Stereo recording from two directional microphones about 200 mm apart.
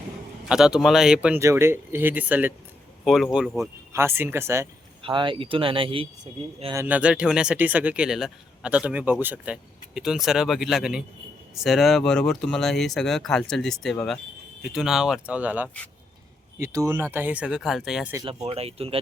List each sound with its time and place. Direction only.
0.4 s speech: 5° right (ahead or behind)
3.9 s speech: 10° right (ahead or behind)
5.0 s speech: 25° right (ahead or behind)
6.7 s speech: 10° right (ahead or behind)
18.1 s speech: 20° right (ahead or behind)
18.4 s speech: 30° right (ahead or behind)